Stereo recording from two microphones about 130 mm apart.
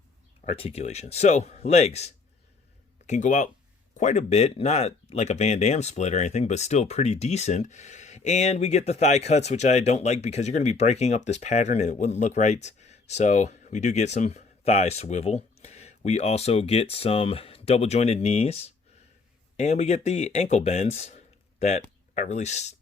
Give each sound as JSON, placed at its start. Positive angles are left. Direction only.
{"t": 0.4, "sound": "speech", "side_deg": 50}
{"t": 3.1, "sound": "speech", "side_deg": 75}